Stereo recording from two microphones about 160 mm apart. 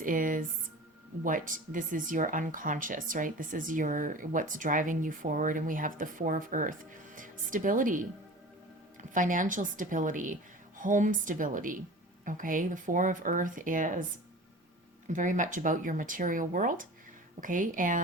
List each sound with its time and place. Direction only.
0.0 s speech: 55° right (ahead or behind)
9.1 s speech: 55° right (ahead or behind)
15.0 s speech: 50° right (ahead or behind)